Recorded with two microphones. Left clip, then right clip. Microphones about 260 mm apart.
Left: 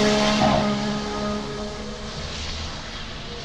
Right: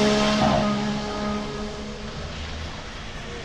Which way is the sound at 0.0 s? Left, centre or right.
Centre.